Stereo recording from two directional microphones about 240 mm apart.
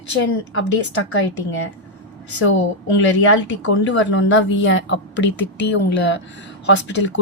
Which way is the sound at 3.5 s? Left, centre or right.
Left.